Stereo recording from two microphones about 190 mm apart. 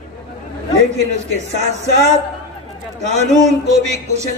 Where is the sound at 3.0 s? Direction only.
35° right (ahead or behind).